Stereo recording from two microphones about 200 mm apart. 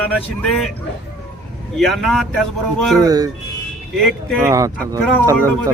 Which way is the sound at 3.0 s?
20° right (ahead or behind).